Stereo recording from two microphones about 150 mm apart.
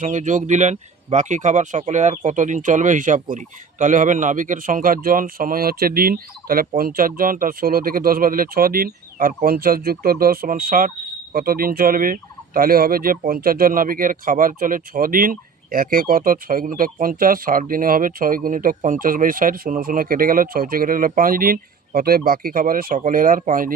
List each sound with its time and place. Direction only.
0.0 s speech: 55° right (ahead or behind)